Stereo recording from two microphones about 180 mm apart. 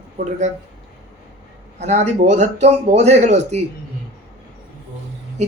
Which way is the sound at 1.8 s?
40° right (ahead or behind).